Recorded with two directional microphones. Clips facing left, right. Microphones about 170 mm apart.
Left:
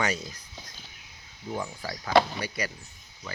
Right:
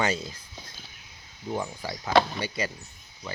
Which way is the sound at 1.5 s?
20° right (ahead or behind).